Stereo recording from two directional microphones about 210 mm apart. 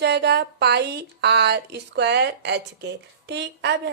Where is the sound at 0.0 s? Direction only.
50° right (ahead or behind).